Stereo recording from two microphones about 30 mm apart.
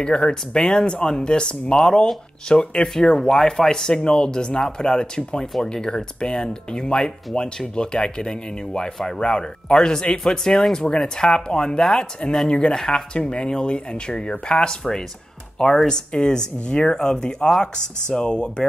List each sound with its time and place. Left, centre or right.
0.0 s speech: left
12.7 s speech: centre
13.1 s speech: left
14.5 s speech: left